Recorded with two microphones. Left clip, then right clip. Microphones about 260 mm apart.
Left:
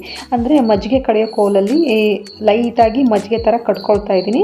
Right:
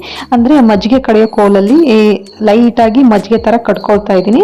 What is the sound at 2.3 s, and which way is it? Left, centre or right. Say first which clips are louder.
Speech: right 5 dB; right.